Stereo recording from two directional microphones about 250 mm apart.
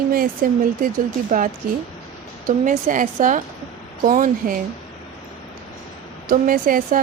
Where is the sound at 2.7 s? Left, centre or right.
Right.